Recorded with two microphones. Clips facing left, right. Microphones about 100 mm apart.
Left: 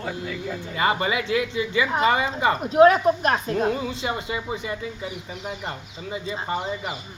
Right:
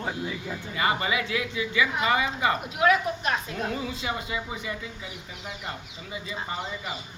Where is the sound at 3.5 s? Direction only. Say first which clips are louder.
Left 7 dB; 30° left (ahead or behind).